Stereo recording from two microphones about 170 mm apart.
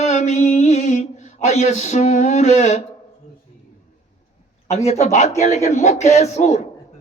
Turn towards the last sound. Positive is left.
turn(degrees=40)  # may be behind; listen again after turning